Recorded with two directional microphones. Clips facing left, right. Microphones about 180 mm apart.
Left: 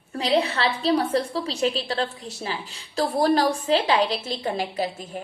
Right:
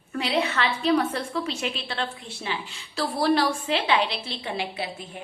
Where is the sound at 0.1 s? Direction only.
35° left (ahead or behind).